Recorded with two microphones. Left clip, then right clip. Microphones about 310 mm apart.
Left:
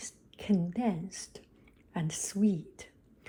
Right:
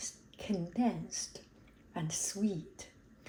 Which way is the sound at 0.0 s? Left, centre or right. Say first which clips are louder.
Even; left.